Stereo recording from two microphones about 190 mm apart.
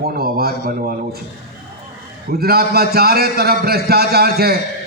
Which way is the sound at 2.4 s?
55° right (ahead or behind).